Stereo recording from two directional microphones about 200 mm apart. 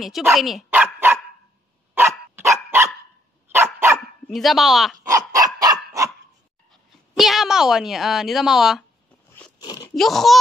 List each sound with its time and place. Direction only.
0.0 s dog: centre (ahead or behind)
4.3 s speech: centre (ahead or behind)
5.0 s dog: 15° right (ahead or behind)
6.7 s a woman's voice: centre (ahead or behind)
9.6 s crunch: 20° left (ahead or behind)
9.9 s speech: centre (ahead or behind)